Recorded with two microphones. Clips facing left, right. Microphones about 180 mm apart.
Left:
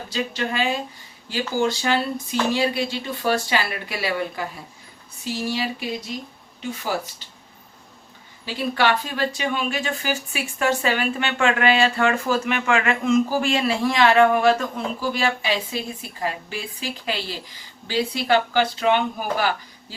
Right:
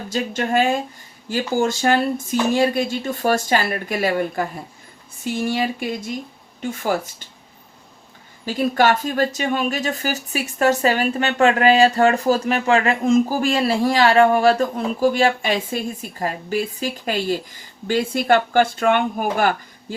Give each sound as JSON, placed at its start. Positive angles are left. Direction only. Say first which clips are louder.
{"t": 0.1, "sound": "a woman's voice", "louder": "right 5 dB", "side_deg": -45}
{"t": 8.4, "sound": "speech", "louder": "right 4 dB", "side_deg": -45}
{"t": 15.0, "sound": "a woman's voice", "louder": "right 7 dB", "side_deg": -45}